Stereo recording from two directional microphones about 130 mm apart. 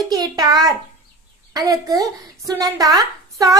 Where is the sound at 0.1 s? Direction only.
30° right (ahead or behind).